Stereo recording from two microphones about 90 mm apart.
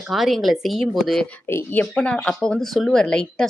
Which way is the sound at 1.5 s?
30° left (ahead or behind).